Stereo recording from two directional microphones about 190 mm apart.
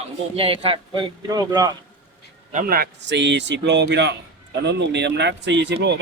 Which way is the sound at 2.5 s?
45° right (ahead or behind).